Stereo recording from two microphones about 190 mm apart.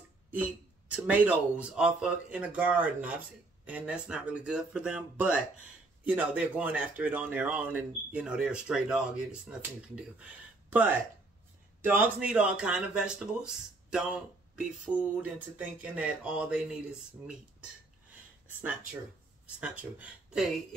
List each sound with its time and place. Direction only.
0.3 s speech: 5° right (ahead or behind)
19.6 s speech: 5° right (ahead or behind)